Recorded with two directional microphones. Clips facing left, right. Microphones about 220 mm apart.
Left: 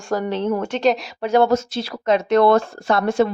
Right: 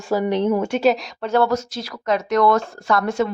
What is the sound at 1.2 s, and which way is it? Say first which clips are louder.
Speech: left 4 dB; 15° left (ahead or behind).